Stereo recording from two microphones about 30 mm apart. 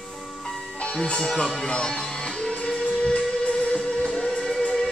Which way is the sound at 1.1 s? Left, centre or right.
Centre.